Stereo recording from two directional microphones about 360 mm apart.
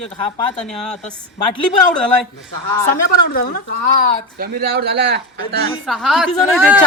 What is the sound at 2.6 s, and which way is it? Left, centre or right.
Speech, centre.